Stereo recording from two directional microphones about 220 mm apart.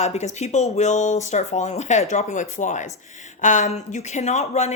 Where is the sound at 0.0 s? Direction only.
30° left (ahead or behind).